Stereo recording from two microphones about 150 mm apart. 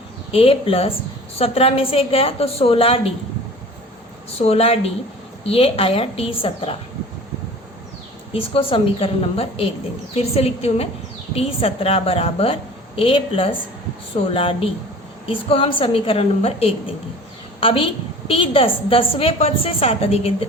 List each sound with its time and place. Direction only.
0.3 s a woman's voice: 40° left (ahead or behind)
4.4 s a woman's voice: 45° left (ahead or behind)
8.3 s a woman's voice: 40° left (ahead or behind)